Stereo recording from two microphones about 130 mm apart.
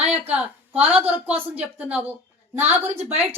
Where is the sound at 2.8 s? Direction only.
55° right (ahead or behind).